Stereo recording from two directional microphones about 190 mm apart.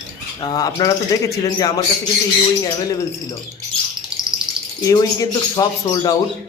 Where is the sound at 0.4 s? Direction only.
20° left (ahead or behind).